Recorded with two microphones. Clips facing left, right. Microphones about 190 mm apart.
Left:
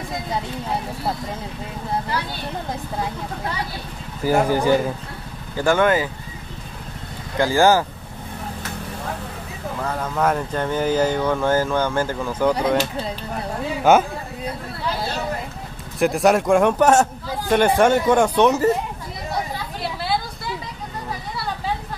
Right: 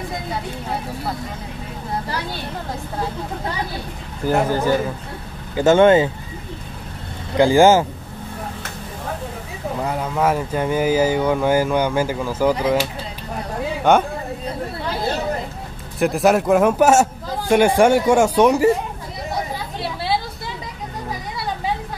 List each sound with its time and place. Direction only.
4.2 s speech: 5° left (ahead or behind)
5.6 s speech: 25° right (ahead or behind)
7.3 s speech: 20° right (ahead or behind)
9.8 s speech: 15° right (ahead or behind)
13.9 s speech: 5° left (ahead or behind)
16.0 s speech: centre (ahead or behind)